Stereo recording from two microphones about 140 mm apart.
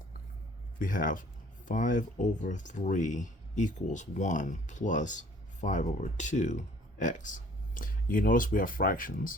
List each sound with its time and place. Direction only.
0.8 s speech: 75° left (ahead or behind)